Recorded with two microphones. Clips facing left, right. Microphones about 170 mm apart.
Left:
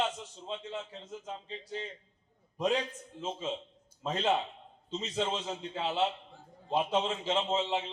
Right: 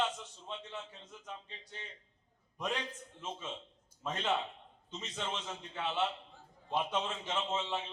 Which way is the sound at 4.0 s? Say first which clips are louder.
Left 5 dB; 30° left (ahead or behind).